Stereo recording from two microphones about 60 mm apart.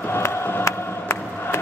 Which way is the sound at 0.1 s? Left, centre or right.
Left.